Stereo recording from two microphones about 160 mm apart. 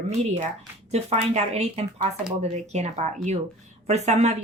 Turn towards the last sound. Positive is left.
turn(degrees=-45)  # may be behind; listen again after turning